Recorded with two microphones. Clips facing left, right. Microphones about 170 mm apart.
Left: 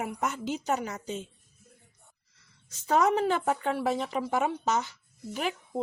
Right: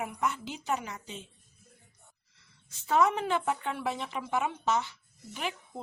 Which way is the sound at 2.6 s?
40° left (ahead or behind).